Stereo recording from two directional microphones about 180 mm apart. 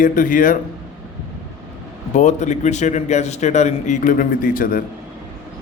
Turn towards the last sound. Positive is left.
turn(degrees=50)  # may be behind; listen again after turning